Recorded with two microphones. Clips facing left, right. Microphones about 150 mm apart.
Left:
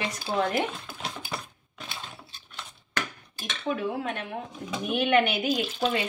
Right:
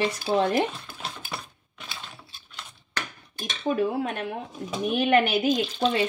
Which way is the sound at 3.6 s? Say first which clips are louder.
Right 4 dB; 40° right (ahead or behind).